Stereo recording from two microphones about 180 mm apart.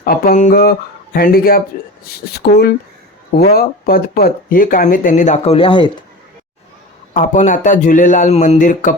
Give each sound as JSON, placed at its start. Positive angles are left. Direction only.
{"t": 0.0, "sound": "speech", "side_deg": 45}
{"t": 7.1, "sound": "speech", "side_deg": 45}